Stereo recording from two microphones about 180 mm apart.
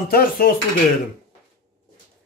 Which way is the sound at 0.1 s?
55° left (ahead or behind).